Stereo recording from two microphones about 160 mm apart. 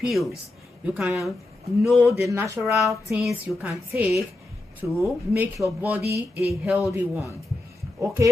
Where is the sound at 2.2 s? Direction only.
20° right (ahead or behind).